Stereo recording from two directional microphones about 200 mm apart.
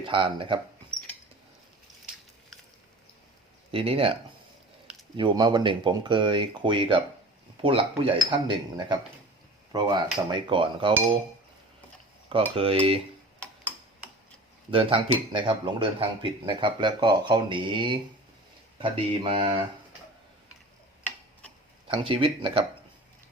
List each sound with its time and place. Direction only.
0.0 s speech: 25° right (ahead or behind)
3.7 s speech: 30° right (ahead or behind)
12.3 s speech: 25° right (ahead or behind)
14.7 s speech: 25° right (ahead or behind)
21.8 s speech: 25° right (ahead or behind)